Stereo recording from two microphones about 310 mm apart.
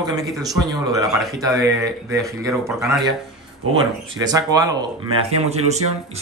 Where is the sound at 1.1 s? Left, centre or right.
Centre.